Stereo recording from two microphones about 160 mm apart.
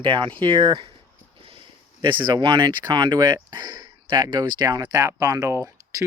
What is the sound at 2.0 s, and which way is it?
Speech, 30° right (ahead or behind).